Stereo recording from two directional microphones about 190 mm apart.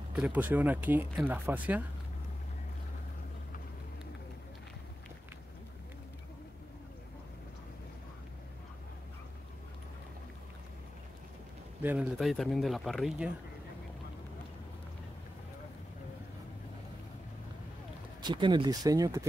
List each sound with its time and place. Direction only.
0.1 s speech: 5° right (ahead or behind)
11.8 s speech: 5° right (ahead or behind)
18.2 s speech: 25° right (ahead or behind)